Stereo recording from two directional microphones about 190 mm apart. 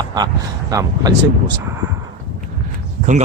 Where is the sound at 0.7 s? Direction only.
20° right (ahead or behind).